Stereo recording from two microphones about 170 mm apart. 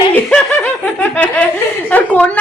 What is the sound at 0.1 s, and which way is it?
Snicker, 10° left (ahead or behind).